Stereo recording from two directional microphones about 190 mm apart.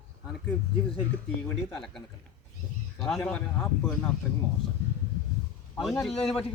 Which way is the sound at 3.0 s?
Centre (ahead or behind).